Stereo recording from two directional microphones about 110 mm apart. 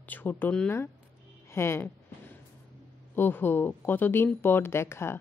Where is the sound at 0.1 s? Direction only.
15° left (ahead or behind).